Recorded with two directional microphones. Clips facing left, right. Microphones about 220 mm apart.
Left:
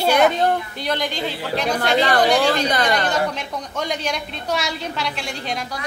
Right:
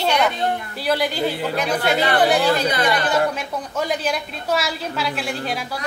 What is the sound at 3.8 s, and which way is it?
A woman's voice, 5° right (ahead or behind).